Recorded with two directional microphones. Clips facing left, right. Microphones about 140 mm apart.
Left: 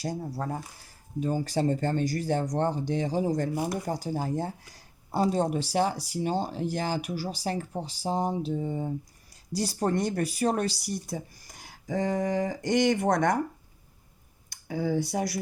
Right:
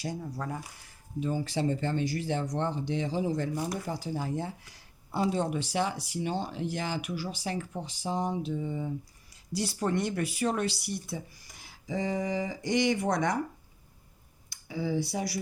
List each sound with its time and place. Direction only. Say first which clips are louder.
0.0 s speech: left 3 dB; 35° left (ahead or behind)
14.5 s speech: left 3 dB; 50° left (ahead or behind)